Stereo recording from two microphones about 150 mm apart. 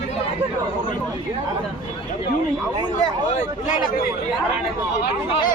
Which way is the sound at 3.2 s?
55° left (ahead or behind).